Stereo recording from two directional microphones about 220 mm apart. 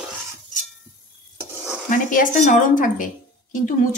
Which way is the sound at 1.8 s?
35° left (ahead or behind).